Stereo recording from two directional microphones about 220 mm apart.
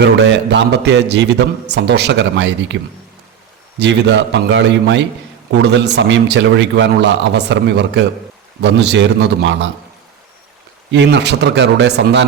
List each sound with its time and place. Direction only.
0.0 s a man's voice: 50° right (ahead or behind)
3.8 s a man's voice: 50° right (ahead or behind)
10.9 s a man's voice: 50° right (ahead or behind)